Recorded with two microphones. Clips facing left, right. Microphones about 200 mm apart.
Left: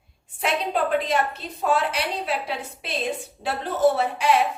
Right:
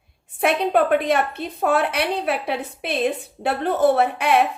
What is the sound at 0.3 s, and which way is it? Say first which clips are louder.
A woman's voice: right 6 dB; 60° right (ahead or behind).